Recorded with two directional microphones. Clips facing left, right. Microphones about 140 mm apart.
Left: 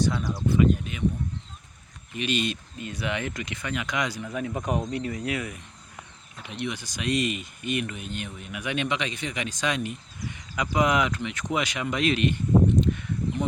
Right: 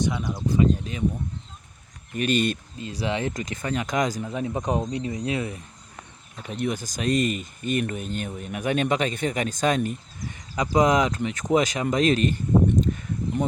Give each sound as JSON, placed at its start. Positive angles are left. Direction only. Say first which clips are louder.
{"t": 0.0, "sound": "speech", "louder": "even", "side_deg": -20}
{"t": 0.5, "sound": "speech", "louder": "right 1 dB", "side_deg": -30}
{"t": 2.1, "sound": "speech", "louder": "right 5 dB", "side_deg": -45}
{"t": 2.7, "sound": "speech", "louder": "right 3 dB", "side_deg": -30}
{"t": 4.2, "sound": "speech", "louder": "right 3 dB", "side_deg": -25}
{"t": 6.4, "sound": "speech", "louder": "right 5 dB", "side_deg": -45}
{"t": 12.8, "sound": "a sound", "louder": "even", "side_deg": -40}